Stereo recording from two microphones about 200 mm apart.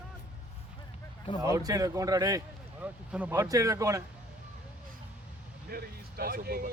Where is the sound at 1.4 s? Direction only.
15° right (ahead or behind).